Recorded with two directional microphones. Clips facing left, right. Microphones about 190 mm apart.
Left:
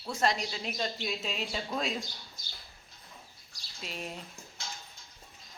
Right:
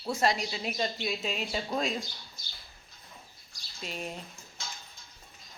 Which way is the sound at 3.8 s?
Centre (ahead or behind).